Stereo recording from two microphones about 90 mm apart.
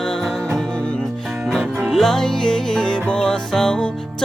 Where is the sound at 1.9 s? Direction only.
5° left (ahead or behind).